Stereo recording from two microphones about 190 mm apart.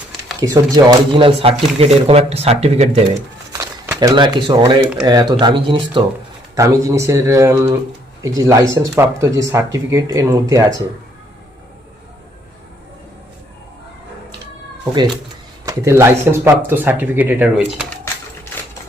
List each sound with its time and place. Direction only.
0.3 s speech: 20° right (ahead or behind)
3.5 s speech: 15° right (ahead or behind)
15.6 s speech: 15° right (ahead or behind)